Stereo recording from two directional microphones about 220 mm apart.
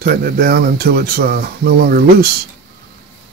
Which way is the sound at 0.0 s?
45° right (ahead or behind).